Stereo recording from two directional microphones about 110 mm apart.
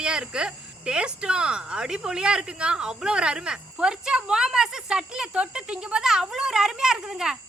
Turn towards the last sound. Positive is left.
turn(degrees=-5)  # may be behind; listen again after turning